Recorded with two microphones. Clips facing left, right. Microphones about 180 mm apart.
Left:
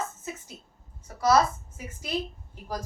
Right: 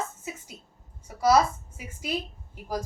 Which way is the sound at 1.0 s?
10° right (ahead or behind).